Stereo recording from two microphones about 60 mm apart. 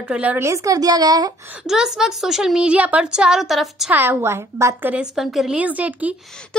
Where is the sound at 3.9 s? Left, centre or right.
Right.